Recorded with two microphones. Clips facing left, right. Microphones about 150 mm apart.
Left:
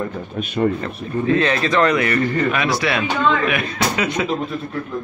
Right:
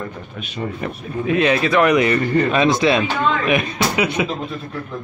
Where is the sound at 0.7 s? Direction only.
15° right (ahead or behind).